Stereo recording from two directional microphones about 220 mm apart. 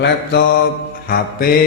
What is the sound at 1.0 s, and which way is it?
Speech, 40° left (ahead or behind).